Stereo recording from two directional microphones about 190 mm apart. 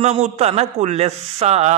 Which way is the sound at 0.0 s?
35° right (ahead or behind).